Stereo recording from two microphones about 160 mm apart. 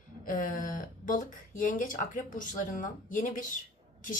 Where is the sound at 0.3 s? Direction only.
55° left (ahead or behind).